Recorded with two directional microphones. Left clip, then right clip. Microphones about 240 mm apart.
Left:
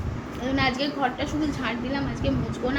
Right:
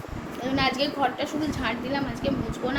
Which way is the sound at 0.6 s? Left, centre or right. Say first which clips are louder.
Right 1 dB; centre.